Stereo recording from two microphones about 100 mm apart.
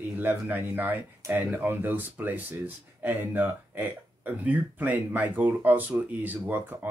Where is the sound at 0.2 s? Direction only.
20° right (ahead or behind).